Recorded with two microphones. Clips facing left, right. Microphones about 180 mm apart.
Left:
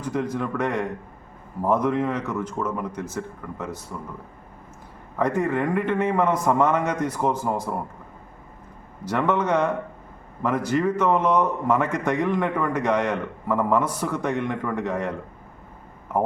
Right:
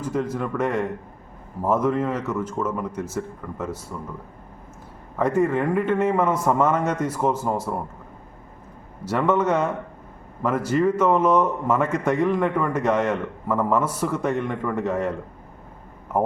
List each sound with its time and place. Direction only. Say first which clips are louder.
0.3 s a man's voice: right 1 dB; 5° right (ahead or behind)
5.1 s a man's voice: right 2 dB; 5° right (ahead or behind)
9.0 s a man's voice: right 2 dB; 5° right (ahead or behind)
16.1 s a man's voice: right 1 dB; 10° right (ahead or behind)